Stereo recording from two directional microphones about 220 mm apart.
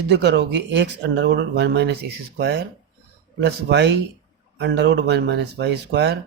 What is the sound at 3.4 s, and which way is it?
Speech, 50° right (ahead or behind).